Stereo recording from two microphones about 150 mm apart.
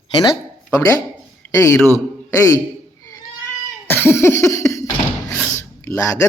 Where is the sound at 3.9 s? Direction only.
15° left (ahead or behind).